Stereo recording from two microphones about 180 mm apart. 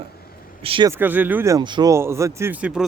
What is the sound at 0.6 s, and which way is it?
Speech, 30° right (ahead or behind).